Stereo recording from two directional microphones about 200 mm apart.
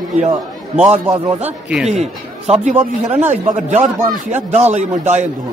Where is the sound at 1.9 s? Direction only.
30° right (ahead or behind).